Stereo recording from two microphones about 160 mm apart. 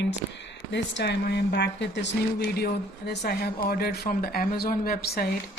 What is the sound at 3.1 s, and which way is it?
Speech, 75° left (ahead or behind).